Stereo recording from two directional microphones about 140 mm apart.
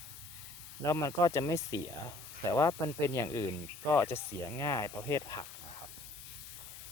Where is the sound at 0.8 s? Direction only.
20° left (ahead or behind).